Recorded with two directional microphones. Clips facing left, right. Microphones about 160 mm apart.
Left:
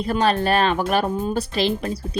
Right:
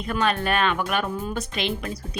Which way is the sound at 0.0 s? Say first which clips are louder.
Left 4 dB; 35° left (ahead or behind).